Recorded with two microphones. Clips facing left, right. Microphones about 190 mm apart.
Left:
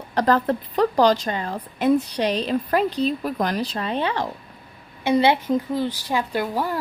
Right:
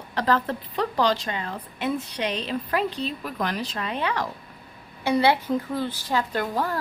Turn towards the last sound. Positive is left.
turn(degrees=10)  # may be behind; listen again after turning